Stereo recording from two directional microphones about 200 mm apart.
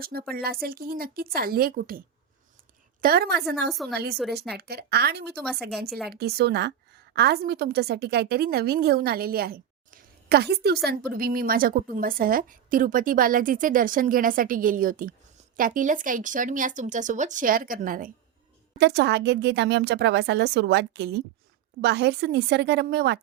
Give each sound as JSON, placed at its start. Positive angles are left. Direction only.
{"t": 0.0, "sound": "a woman's voice", "side_deg": -50}
{"t": 3.7, "sound": "a woman's voice", "side_deg": 0}
{"t": 3.9, "sound": "a woman's voice", "side_deg": -55}
{"t": 5.4, "sound": "a woman's voice", "side_deg": 0}
{"t": 5.8, "sound": "a woman's voice", "side_deg": -55}
{"t": 18.8, "sound": "speech", "side_deg": -55}